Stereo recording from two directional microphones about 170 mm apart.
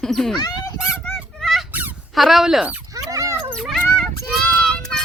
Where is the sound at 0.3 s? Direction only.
20° left (ahead or behind).